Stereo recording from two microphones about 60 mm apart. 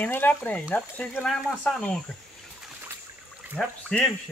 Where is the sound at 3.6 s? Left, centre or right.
Centre.